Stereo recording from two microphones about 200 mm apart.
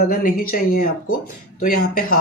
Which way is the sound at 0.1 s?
45° left (ahead or behind).